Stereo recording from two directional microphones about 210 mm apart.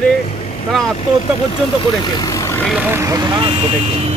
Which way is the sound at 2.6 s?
5° right (ahead or behind).